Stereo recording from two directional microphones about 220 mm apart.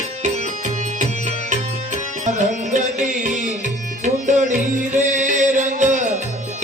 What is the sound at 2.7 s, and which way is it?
Music, 35° right (ahead or behind).